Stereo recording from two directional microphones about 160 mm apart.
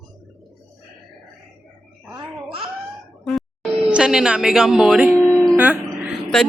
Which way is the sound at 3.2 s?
Centre (ahead or behind).